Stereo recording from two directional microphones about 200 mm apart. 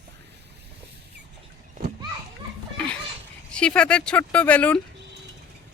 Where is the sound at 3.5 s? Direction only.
5° left (ahead or behind).